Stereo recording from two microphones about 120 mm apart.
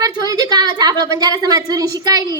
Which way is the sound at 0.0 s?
30° right (ahead or behind).